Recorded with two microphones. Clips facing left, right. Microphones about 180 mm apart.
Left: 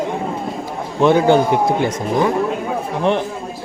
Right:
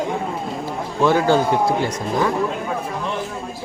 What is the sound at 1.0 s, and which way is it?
Speech, 20° left (ahead or behind).